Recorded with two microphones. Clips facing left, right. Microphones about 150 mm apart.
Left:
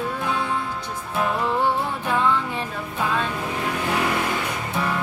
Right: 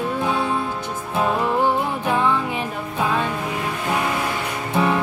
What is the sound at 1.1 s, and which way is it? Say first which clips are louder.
Music: right 3 dB; 15° right (ahead or behind).